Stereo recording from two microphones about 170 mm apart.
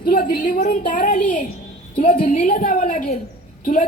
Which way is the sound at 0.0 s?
60° left (ahead or behind).